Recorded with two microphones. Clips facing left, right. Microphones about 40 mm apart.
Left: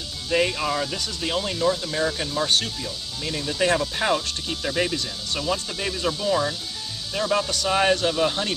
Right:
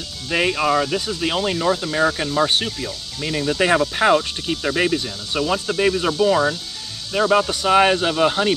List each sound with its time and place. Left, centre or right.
0.3 s speech: right